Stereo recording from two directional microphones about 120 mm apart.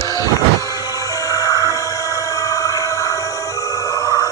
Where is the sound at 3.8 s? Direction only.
30° left (ahead or behind).